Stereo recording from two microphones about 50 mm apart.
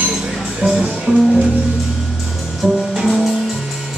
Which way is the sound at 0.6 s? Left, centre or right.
Right.